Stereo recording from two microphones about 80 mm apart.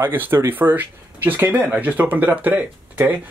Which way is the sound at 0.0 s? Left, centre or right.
Right.